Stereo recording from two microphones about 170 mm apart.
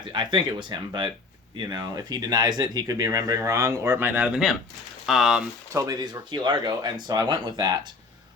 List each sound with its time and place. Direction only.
0.1 s speech: 30° right (ahead or behind); by 5.5 s 5° right (ahead or behind)
5.7 s speech: 20° right (ahead or behind)